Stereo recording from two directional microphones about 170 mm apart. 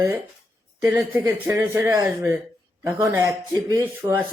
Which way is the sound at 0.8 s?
15° right (ahead or behind).